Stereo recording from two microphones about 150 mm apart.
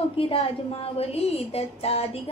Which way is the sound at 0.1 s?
40° left (ahead or behind).